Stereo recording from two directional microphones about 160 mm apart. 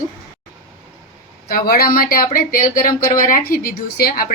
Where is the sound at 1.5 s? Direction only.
65° left (ahead or behind).